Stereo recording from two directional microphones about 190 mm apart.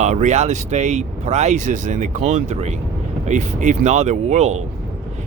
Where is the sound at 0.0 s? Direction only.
40° right (ahead or behind).